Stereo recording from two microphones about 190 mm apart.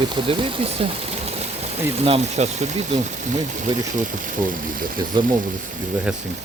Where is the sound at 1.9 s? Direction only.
35° right (ahead or behind).